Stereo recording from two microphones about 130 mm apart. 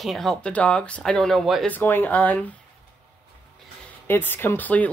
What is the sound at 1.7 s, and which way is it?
Speech, 15° left (ahead or behind).